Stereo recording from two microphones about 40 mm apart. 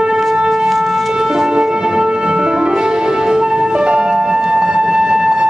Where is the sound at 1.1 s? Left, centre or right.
Centre.